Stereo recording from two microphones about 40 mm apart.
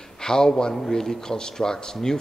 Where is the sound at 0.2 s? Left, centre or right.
Centre.